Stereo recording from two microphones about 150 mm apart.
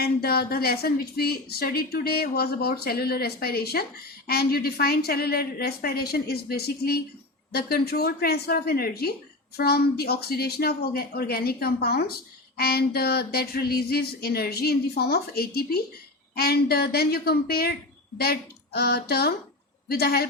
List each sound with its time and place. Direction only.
0.0 s a woman's voice: 90° left